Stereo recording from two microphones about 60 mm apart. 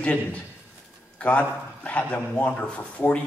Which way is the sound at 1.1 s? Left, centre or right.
Left.